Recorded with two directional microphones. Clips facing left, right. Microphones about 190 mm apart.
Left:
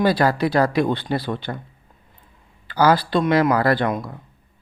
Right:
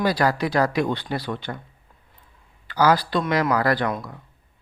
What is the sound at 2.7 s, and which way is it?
Speech, 30° left (ahead or behind).